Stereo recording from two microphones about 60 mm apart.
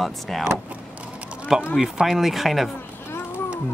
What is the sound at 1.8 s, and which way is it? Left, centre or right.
Speech, centre.